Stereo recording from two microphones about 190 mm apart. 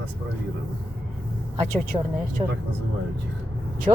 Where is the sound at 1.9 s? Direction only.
30° right (ahead or behind).